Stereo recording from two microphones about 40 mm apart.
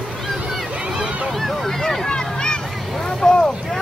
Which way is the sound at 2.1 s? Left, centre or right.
Centre.